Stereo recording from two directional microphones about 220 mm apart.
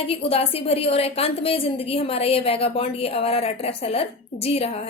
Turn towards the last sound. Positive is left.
turn(degrees=30)  # may be behind; listen again after turning